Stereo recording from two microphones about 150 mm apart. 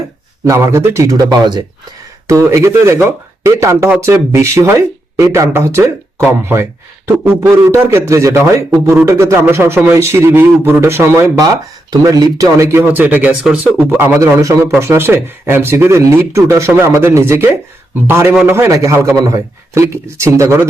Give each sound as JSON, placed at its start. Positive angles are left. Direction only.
{"t": 0.4, "sound": "speech", "side_deg": -20}